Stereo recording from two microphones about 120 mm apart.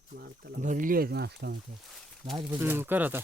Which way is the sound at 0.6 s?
90° right.